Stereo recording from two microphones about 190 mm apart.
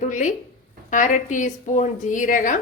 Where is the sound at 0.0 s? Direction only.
40° left (ahead or behind).